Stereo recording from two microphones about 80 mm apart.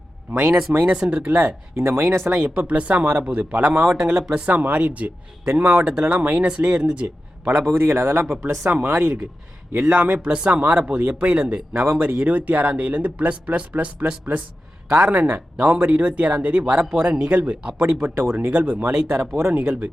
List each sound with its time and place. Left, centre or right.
0.4 s speech: centre
1.7 s speech: right
2.6 s speech: centre
4.2 s speech: centre
4.4 s speech: centre
7.7 s speech: right
10.2 s speech: centre
11.7 s speech: right
18.0 s speech: right